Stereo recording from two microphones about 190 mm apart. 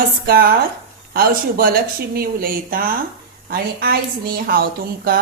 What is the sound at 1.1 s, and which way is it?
A woman's voice, 50° right (ahead or behind).